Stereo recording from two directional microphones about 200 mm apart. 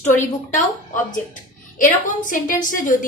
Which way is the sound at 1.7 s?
40° left (ahead or behind).